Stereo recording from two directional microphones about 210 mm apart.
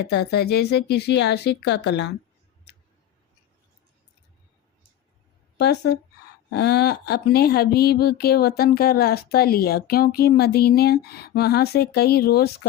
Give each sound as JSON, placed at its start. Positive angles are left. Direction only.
{"t": 0.0, "sound": "speech", "side_deg": 50}
{"t": 5.5, "sound": "speech", "side_deg": 50}